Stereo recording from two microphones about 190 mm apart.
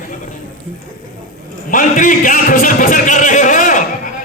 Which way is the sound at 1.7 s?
45° left (ahead or behind).